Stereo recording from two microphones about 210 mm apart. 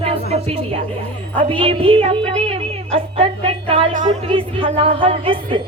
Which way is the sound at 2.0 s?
25° right (ahead or behind).